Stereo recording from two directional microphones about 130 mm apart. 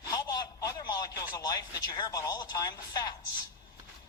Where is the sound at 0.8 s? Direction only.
25° left (ahead or behind).